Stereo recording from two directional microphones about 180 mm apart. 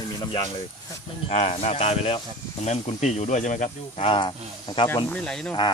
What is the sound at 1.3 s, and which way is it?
Speech, 40° left (ahead or behind).